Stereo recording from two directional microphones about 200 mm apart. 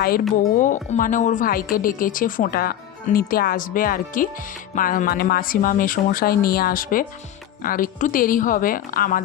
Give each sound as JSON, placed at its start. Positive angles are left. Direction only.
{"t": 0.5, "sound": "speech", "side_deg": 40}